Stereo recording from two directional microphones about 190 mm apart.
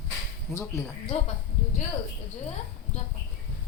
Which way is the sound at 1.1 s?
35° left (ahead or behind).